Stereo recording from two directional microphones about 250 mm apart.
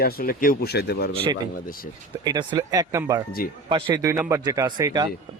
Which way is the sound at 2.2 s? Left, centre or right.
Centre.